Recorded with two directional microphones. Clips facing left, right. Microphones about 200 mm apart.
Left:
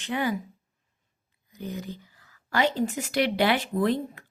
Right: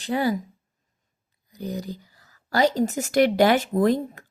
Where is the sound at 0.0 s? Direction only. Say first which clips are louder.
Right 4 dB; 35° right (ahead or behind).